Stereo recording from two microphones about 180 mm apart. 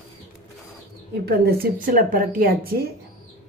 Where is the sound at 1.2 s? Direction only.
60° right (ahead or behind).